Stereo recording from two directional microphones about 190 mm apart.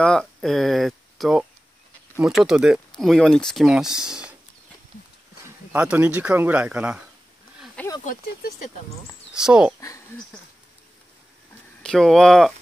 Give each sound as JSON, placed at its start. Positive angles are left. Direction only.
{"t": 0.0, "sound": "speech", "side_deg": 5}
{"t": 5.4, "sound": "speech", "side_deg": -5}
{"t": 7.6, "sound": "snake", "side_deg": 5}
{"t": 8.0, "sound": "speech", "side_deg": 50}
{"t": 9.3, "sound": "speech", "side_deg": -5}
{"t": 9.8, "sound": "speech", "side_deg": 15}
{"t": 11.8, "sound": "speech", "side_deg": 5}